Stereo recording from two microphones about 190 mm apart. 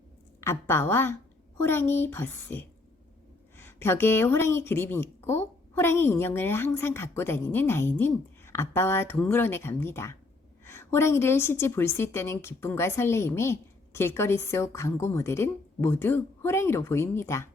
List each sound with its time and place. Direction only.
0.4 s a woman's voice: 10° left (ahead or behind)